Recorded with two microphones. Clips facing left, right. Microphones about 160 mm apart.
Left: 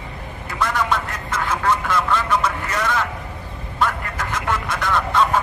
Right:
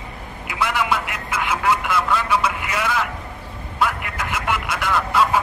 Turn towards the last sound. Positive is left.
turn(degrees=-5)  # may be behind; listen again after turning